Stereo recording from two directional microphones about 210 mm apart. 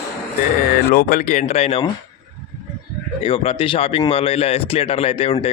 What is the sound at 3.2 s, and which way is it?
A man's voice, 30° left (ahead or behind).